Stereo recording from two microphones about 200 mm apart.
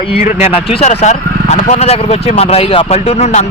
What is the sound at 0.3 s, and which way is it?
Speech, 35° left (ahead or behind).